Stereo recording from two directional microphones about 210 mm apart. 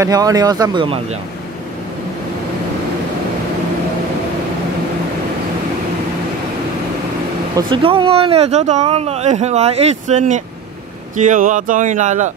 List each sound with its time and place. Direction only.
0.0 s speech: 15° right (ahead or behind)
7.5 s speech: 25° right (ahead or behind)